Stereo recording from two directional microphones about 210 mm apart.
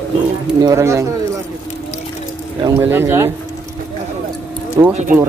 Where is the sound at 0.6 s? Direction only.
15° right (ahead or behind).